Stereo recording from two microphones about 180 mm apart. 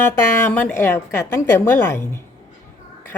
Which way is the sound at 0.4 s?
10° left (ahead or behind).